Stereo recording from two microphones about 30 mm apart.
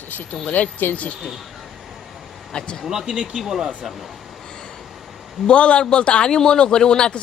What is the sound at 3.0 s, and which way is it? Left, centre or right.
Speech, right.